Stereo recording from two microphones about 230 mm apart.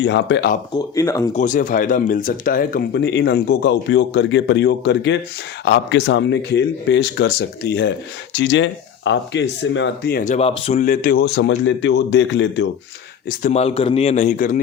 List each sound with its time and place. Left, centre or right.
0.0 s speech: left
0.7 s speech: centre
1.3 s speech: left
13.4 s a man's voice: left